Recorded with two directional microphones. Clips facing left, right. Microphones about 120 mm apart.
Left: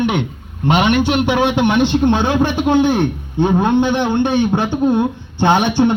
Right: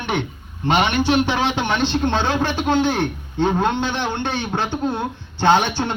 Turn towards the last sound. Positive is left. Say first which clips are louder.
# left 4 dB
turn(degrees=15)  # may be behind; listen again after turning